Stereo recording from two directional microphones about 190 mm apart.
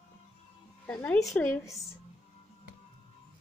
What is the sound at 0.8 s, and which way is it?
Speech, 10° left (ahead or behind).